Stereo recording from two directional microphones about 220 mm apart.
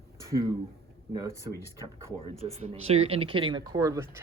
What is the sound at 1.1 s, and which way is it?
Speech, 15° right (ahead or behind).